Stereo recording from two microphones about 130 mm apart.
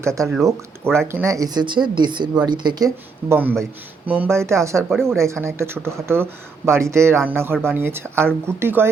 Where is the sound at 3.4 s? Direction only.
15° right (ahead or behind).